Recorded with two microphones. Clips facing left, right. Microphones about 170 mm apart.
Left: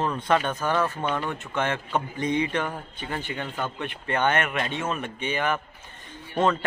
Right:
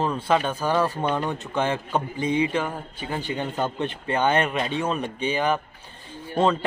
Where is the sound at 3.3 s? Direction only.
20° right (ahead or behind).